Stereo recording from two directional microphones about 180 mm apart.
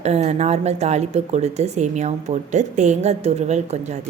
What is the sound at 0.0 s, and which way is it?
A woman's voice, 35° right (ahead or behind).